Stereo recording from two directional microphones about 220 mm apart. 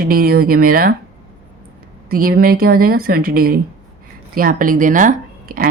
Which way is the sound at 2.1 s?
40° right (ahead or behind).